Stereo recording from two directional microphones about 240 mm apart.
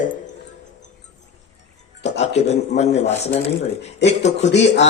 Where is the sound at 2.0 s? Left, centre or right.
Left.